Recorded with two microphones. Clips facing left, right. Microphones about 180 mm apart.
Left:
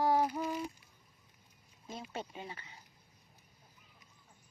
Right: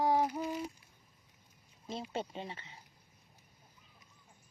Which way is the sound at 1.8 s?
30° right (ahead or behind).